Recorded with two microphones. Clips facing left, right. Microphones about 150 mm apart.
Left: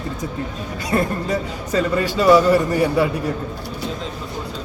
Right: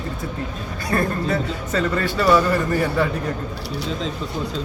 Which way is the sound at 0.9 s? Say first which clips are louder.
Left 1 dB; 15° left (ahead or behind).